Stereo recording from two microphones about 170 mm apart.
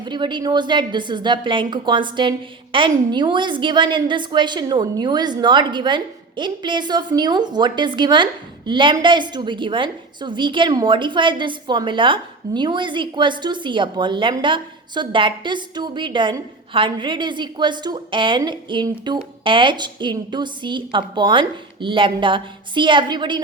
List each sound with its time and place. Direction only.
0.0 s a woman's voice: 25° right (ahead or behind)